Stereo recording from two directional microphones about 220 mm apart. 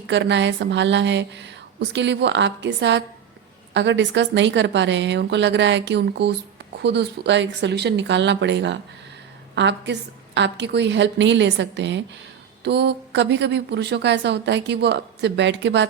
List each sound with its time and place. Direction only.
0.1 s a woman's voice: 55° right (ahead or behind)